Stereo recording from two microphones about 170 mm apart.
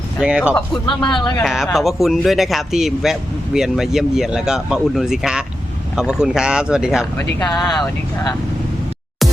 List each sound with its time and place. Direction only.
0.2 s speech: 5° right (ahead or behind)
0.5 s speech: 5° left (ahead or behind)
1.0 s speech: 25° left (ahead or behind)
1.7 s speech: centre (ahead or behind)
7.0 s speech: 20° left (ahead or behind)